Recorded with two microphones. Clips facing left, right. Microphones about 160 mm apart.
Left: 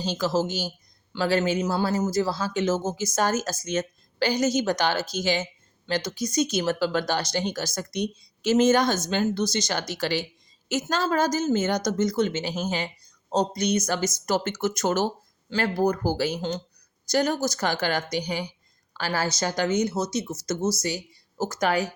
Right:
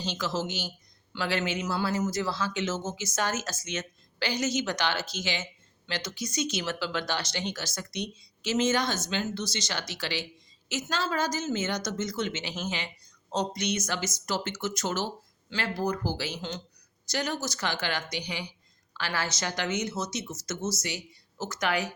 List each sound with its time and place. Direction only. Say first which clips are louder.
0.0 s a woman's voice: left 6 dB; 40° left (ahead or behind)